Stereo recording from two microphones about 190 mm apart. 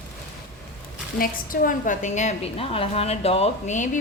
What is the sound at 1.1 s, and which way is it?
A woman's voice, 45° left (ahead or behind).